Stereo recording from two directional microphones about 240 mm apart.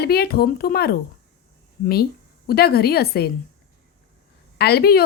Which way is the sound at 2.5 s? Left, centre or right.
Left.